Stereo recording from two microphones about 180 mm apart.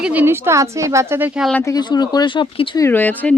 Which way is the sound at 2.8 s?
10° left (ahead or behind).